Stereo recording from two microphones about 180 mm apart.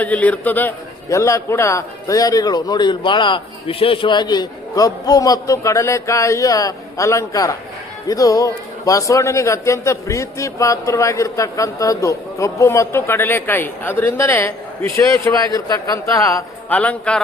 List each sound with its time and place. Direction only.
0.0 s a man's voice: 10° left (ahead or behind)